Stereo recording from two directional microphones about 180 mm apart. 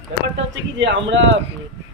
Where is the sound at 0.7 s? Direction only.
85° right.